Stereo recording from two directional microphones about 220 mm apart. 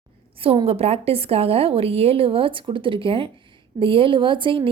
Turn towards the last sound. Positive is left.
turn(degrees=-20)  # may be behind; listen again after turning